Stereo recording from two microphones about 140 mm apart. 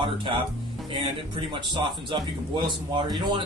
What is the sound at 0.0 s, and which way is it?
Speech, 40° right (ahead or behind).